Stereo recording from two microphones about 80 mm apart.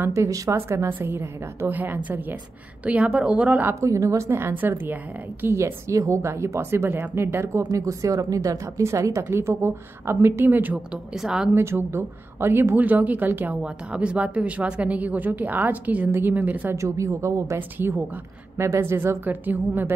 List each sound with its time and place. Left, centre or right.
0.0 s a woman's voice: right; by 3.7 s centre
3.8 s a woman's voice: right
9.0 s a woman's voice: right
11.1 s speech: centre
11.5 s speech: right
13.6 s speech: centre
16.7 s a woman's voice: right
17.6 s speech: right